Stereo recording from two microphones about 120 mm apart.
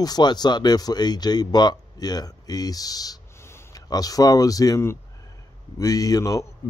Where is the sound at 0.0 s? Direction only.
35° left (ahead or behind).